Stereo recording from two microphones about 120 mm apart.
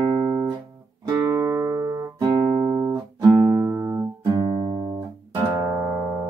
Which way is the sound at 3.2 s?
20° right (ahead or behind).